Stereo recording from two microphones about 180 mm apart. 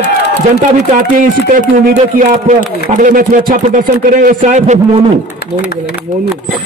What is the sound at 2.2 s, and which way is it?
Speech, 45° right (ahead or behind).